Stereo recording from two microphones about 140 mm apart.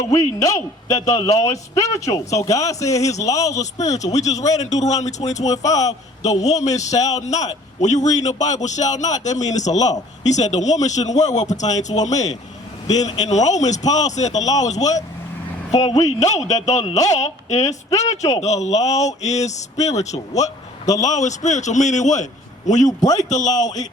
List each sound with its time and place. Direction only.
0.1 s speech: 25° left (ahead or behind)
3.0 s speech: 55° left (ahead or behind)
3.2 s speech: 25° left (ahead or behind)
3.6 s a man's voice: 55° left (ahead or behind)
22.9 s speech: 25° left (ahead or behind)